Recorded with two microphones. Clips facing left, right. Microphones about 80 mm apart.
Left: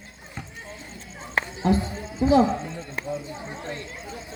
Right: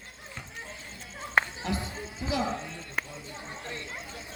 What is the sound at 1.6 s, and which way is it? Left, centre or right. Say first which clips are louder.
Music: left 10 dB; left.